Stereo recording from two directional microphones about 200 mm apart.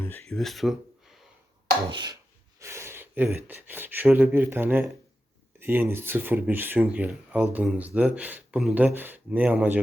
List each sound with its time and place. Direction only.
0.0 s speech: 5° left (ahead or behind)
1.9 s a sound: 25° right (ahead or behind)
2.6 s speech: 15° right (ahead or behind)